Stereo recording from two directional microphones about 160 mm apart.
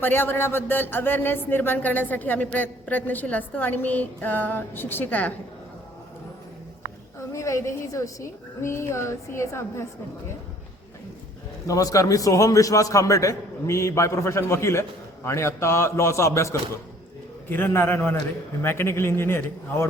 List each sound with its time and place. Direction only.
0.0 s speech: 15° left (ahead or behind)
7.2 s speech: 20° left (ahead or behind)
11.6 s speech: 20° left (ahead or behind)